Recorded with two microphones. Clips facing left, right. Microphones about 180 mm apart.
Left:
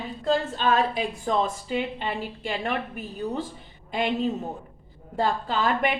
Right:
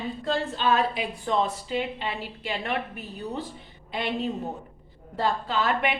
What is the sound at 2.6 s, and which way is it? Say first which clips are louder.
Speech: left 1 dB; 45° left (ahead or behind).